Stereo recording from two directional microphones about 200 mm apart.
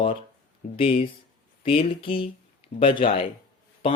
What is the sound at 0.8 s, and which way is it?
Speech, 30° left (ahead or behind).